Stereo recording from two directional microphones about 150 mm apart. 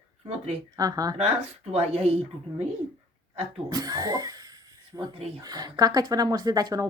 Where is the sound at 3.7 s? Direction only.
25° right (ahead or behind).